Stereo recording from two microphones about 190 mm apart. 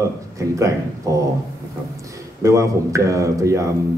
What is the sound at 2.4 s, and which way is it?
A man's voice, 15° right (ahead or behind).